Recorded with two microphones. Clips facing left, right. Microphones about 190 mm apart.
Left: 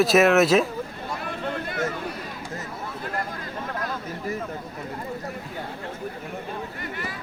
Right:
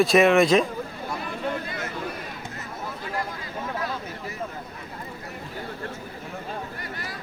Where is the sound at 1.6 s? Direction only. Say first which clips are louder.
Left 6 dB; 55° left (ahead or behind).